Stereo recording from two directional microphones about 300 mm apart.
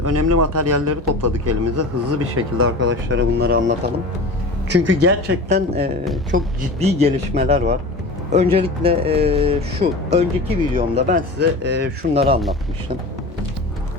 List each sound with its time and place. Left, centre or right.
0.0 s a man's voice: right
5.5 s a man's voice: right
11.3 s speech: right
12.1 s a man's voice: centre